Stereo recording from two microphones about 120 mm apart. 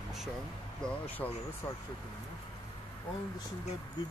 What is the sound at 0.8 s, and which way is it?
Speech, 10° left (ahead or behind).